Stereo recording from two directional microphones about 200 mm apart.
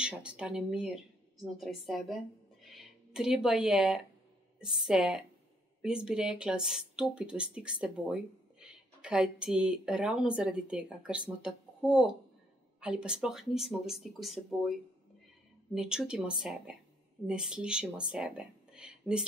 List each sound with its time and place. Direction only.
0.0 s speech: 5° right (ahead or behind)